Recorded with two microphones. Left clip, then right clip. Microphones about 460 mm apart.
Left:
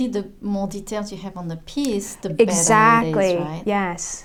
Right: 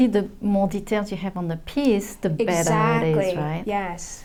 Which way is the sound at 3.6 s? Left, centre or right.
Left.